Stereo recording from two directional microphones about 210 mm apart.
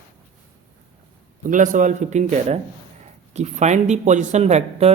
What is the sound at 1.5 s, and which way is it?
Speech, 35° right (ahead or behind).